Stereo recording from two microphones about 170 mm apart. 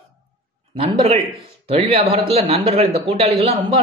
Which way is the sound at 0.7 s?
35° right (ahead or behind).